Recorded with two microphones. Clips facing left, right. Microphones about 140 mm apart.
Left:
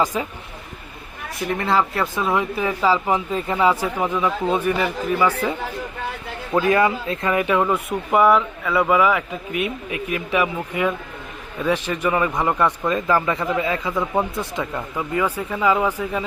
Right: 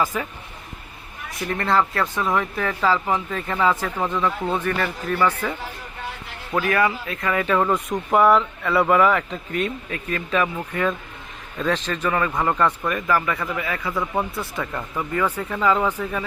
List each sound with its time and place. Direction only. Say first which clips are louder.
0.0 s speech: left 2 dB; 15° left (ahead or behind)
1.5 s speech: even; 5° left (ahead or behind)